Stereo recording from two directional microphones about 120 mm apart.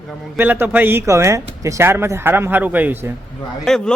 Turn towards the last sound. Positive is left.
turn(degrees=5)  # may be behind; listen again after turning